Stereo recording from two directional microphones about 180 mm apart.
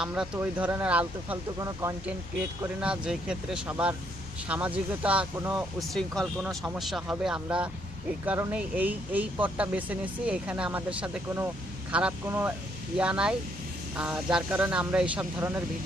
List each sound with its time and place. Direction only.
0.0 s speech: 5° right (ahead or behind)
1.6 s speech: 20° right (ahead or behind)
2.8 s speech: 5° right (ahead or behind)